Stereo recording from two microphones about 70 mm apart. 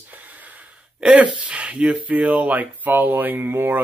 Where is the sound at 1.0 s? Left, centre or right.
Centre.